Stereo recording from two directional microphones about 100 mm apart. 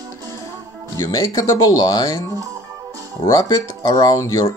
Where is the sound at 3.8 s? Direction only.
45° left (ahead or behind).